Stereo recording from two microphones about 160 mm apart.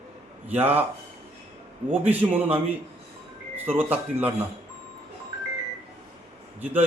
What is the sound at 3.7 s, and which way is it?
Speech, 10° right (ahead or behind).